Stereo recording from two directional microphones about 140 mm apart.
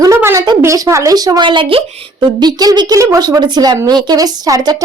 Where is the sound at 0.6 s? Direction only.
20° right (ahead or behind).